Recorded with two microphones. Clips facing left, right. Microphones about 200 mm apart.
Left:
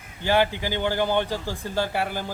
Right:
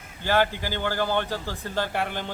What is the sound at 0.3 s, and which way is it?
A man's voice, 15° left (ahead or behind).